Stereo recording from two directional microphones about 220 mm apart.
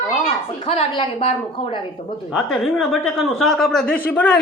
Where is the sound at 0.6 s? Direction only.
25° left (ahead or behind).